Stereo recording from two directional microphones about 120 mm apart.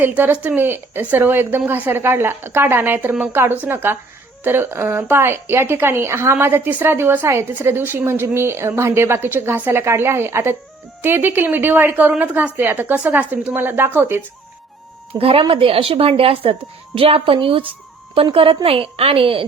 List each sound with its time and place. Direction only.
0.0 s a woman's voice: 15° right (ahead or behind)
15.2 s speech: 55° right (ahead or behind)